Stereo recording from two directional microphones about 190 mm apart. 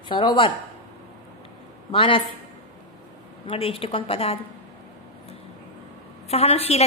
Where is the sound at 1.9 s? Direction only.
30° left (ahead or behind).